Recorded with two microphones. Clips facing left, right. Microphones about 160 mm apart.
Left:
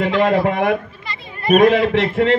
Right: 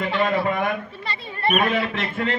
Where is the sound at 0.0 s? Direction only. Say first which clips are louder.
Left 6 dB; 75° left (ahead or behind).